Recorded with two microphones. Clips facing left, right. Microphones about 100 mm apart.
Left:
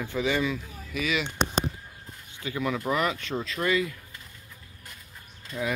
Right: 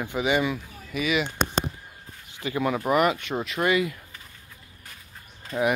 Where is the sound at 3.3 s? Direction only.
60° right (ahead or behind).